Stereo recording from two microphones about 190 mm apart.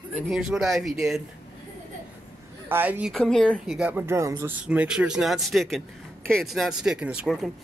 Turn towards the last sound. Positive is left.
turn(degrees=-5)  # may be behind; listen again after turning